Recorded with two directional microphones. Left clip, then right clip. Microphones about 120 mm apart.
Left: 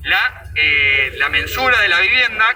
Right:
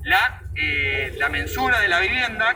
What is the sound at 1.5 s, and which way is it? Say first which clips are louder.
A man's voice: left 4 dB; 40° left (ahead or behind).